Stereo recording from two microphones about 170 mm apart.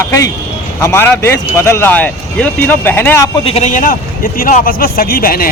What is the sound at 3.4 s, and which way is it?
A man's voice, 40° left (ahead or behind).